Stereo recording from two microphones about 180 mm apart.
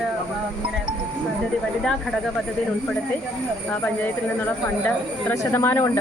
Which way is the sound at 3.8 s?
10° left (ahead or behind).